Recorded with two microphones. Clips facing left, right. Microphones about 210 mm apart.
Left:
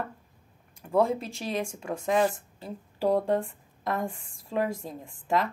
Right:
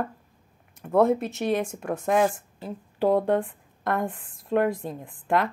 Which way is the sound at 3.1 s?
Centre (ahead or behind).